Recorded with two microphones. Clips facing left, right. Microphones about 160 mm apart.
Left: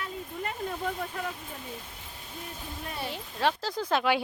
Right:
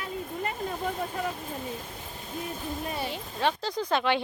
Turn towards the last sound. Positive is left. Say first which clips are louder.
# even
turn(degrees=5)  # may be behind; listen again after turning